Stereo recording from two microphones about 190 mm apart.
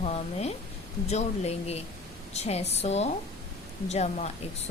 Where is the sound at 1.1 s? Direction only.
35° left (ahead or behind).